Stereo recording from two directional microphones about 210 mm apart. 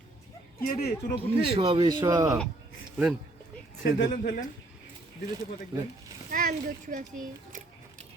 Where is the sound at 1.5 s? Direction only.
25° right (ahead or behind).